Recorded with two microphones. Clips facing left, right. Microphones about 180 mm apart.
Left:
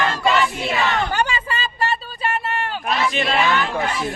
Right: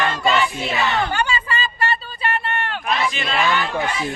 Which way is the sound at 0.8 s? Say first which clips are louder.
Right 1 dB; centre (ahead or behind).